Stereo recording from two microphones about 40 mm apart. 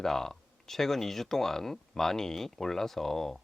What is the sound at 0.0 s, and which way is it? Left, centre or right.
Speech, centre.